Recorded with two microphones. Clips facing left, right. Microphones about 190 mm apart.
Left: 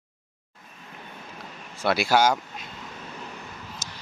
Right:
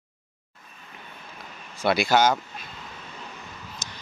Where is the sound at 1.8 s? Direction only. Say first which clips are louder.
Right 1 dB; 5° left (ahead or behind).